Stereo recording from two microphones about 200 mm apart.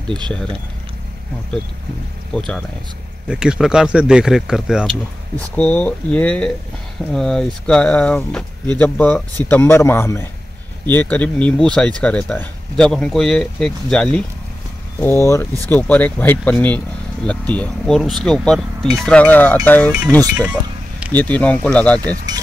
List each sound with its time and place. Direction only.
2.3 s speech: 5° left (ahead or behind)
5.6 s speech: 10° left (ahead or behind)
22.1 s speech: 20° right (ahead or behind)